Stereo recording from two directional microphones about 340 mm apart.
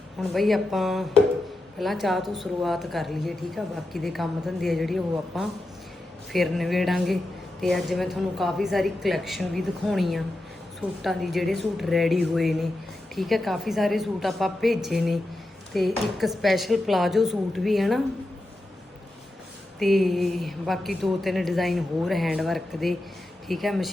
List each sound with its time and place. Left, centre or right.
0.2 s a woman's voice: centre
19.8 s a woman's voice: centre